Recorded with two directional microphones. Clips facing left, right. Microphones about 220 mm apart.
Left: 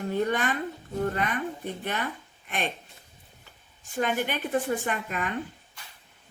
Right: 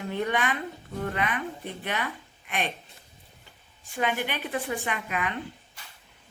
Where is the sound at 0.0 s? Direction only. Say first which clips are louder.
Left 2 dB; 45° left (ahead or behind).